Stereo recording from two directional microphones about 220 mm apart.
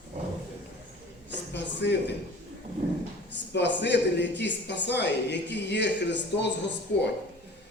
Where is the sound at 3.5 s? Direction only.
50° left (ahead or behind).